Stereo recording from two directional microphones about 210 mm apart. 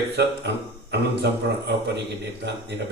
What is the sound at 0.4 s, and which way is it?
A man's voice, 55° right (ahead or behind).